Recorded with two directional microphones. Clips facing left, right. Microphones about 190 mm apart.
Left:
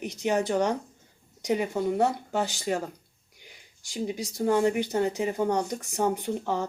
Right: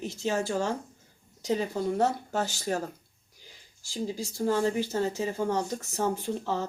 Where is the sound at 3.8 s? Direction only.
15° left (ahead or behind).